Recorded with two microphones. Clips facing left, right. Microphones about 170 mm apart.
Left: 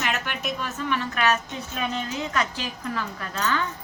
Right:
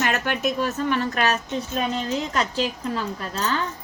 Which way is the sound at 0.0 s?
45° right (ahead or behind).